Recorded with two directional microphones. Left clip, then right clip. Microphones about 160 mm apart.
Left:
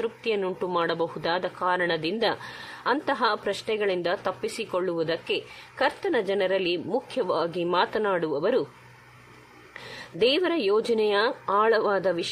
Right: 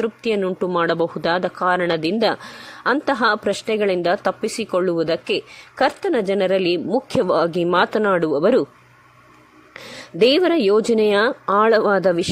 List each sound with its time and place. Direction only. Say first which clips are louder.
0.0 s speech: right 6 dB; 35° right (ahead or behind)
9.8 s speech: right 8 dB; 40° right (ahead or behind)